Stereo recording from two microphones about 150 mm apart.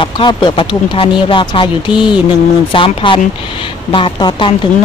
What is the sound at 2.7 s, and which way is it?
Speech, 35° left (ahead or behind).